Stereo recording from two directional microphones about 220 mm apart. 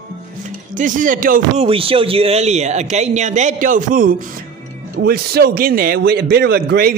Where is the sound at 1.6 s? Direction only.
25° right (ahead or behind).